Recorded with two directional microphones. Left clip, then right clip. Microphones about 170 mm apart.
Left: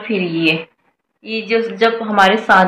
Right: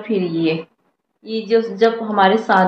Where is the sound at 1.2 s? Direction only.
15° left (ahead or behind).